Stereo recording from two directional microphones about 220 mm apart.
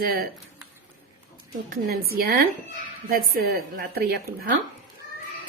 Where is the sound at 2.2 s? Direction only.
45° right (ahead or behind).